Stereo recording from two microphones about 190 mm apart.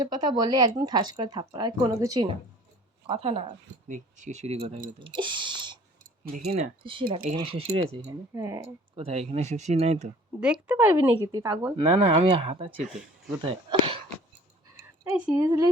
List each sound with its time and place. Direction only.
0.0 s speech: 20° right (ahead or behind)
3.1 s speech: 30° right (ahead or behind)
4.9 s a sound: 25° right (ahead or behind)
6.3 s speech: 55° right (ahead or behind)
6.6 s speech: 25° right (ahead or behind)
8.1 s speech: 15° right (ahead or behind)
9.0 s speech: 30° right (ahead or behind)
10.4 s speech: 5° right (ahead or behind)
11.8 s speech: 30° right (ahead or behind)
14.8 s a sound: 15° right (ahead or behind)